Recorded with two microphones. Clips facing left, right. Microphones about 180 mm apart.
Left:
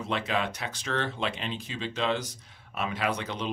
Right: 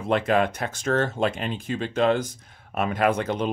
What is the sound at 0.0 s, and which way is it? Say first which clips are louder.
Speech: right 8 dB; 50° right (ahead or behind).